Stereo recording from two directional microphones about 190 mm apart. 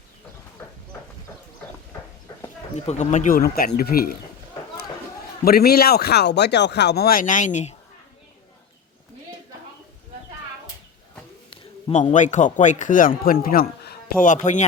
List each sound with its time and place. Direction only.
2.7 s speech: 35° left (ahead or behind); by 4.2 s 50° left (ahead or behind)
5.5 s speech: 55° left (ahead or behind); by 7.8 s 40° left (ahead or behind)
11.5 s a man's voice: 35° left (ahead or behind)